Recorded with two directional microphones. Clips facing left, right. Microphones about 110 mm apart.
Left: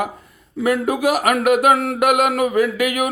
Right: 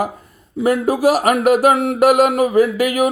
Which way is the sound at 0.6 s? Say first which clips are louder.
Right 3 dB; 35° right (ahead or behind).